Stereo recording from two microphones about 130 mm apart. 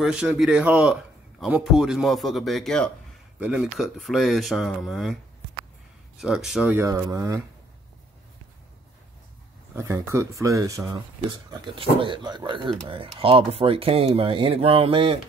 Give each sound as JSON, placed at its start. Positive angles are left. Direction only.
{"t": 0.0, "sound": "speech", "side_deg": -5}
{"t": 3.3, "sound": "speech", "side_deg": -10}
{"t": 6.2, "sound": "speech", "side_deg": -5}
{"t": 6.7, "sound": "speech", "side_deg": -20}
{"t": 9.8, "sound": "speech", "side_deg": -25}
{"t": 11.1, "sound": "speech", "side_deg": -40}